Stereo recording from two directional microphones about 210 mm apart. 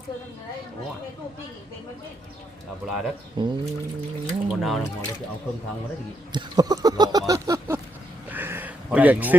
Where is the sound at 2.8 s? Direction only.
Centre (ahead or behind).